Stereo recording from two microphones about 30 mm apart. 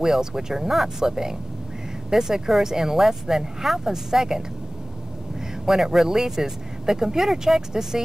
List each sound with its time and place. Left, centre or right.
0.0 s speech: centre
5.7 s speech: centre